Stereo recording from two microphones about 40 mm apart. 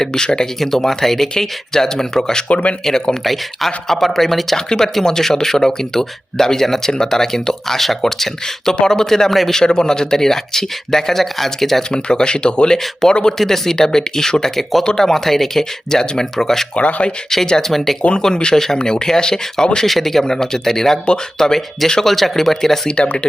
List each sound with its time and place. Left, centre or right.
0.0 s speech: centre
2.5 s speech: left
2.8 s speech: centre
3.2 s speech: centre
11.8 s speech: left
16.7 s speech: left
17.2 s speech: centre
18.2 s speech: centre
20.2 s speech: centre
22.9 s speech: left